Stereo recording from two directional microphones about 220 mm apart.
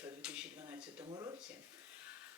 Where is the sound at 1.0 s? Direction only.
20° right (ahead or behind).